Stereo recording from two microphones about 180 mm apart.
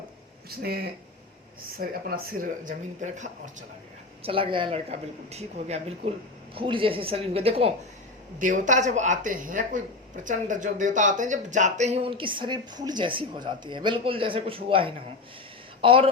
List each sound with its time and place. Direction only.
0.6 s speech: 60° right (ahead or behind); by 3.5 s 45° right (ahead or behind)
4.2 s speech: 30° right (ahead or behind)
8.4 s a woman's voice: 45° right (ahead or behind); by 16.0 s 30° right (ahead or behind)